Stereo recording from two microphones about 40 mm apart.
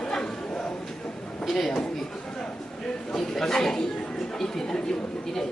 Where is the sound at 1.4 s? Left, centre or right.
Centre.